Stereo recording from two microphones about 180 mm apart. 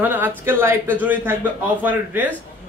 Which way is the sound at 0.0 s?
10° right (ahead or behind).